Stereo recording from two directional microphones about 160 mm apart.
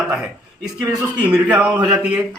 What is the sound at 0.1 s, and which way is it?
A man's voice, 5° right (ahead or behind).